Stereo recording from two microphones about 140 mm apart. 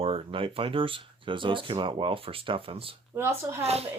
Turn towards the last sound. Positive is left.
turn(degrees=-50)  # may be behind; listen again after turning